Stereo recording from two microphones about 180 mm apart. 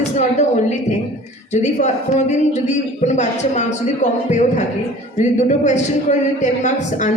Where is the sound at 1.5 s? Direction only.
40° left (ahead or behind).